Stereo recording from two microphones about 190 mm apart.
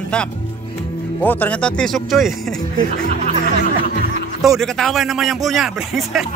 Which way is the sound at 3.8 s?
50° left (ahead or behind).